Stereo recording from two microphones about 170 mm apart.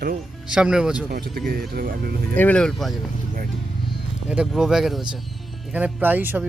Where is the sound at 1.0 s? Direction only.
65° right (ahead or behind).